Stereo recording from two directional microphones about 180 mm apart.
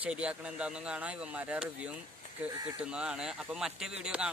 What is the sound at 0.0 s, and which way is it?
Speech, 5° right (ahead or behind).